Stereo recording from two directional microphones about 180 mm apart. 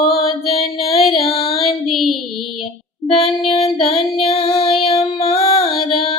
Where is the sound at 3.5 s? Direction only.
35° left (ahead or behind).